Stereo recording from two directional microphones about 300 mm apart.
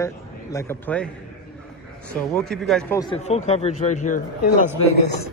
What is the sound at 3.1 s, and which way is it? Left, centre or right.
A man's voice, left.